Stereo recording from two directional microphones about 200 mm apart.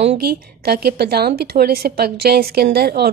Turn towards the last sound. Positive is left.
turn(degrees=-50)  # may be behind; listen again after turning